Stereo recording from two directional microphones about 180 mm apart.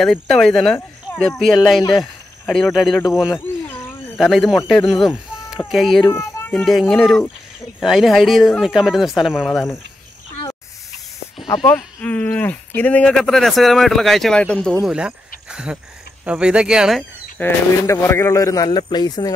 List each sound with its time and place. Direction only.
0.0 s speech: centre (ahead or behind)
3.3 s a sound: 10° left (ahead or behind)
4.6 s speech: 5° left (ahead or behind)
6.0 s children playing: 10° left (ahead or behind)
6.5 s speech: centre (ahead or behind)
11.6 s speech: 10° left (ahead or behind)
14.9 s speech: 5° right (ahead or behind)
15.4 s a sound: 5° right (ahead or behind)
16.3 s speech: 5° right (ahead or behind)
17.4 s a man's voice: 15° left (ahead or behind)